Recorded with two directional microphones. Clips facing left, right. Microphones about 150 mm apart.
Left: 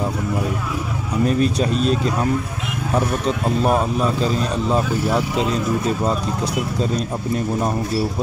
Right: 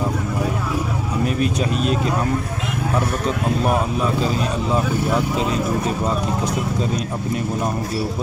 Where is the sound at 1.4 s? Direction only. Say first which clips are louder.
Left 2 dB; 35° left (ahead or behind).